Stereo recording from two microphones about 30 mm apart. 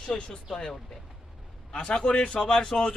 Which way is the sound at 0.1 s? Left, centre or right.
Centre.